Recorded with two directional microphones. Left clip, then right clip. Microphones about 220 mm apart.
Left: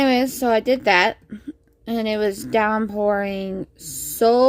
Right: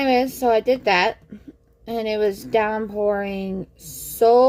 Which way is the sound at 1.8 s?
45° left (ahead or behind).